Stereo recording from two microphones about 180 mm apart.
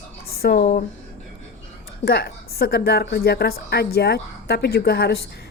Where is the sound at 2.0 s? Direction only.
60° left (ahead or behind).